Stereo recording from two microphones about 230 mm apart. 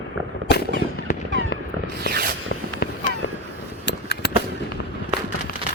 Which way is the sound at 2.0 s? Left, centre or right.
Right.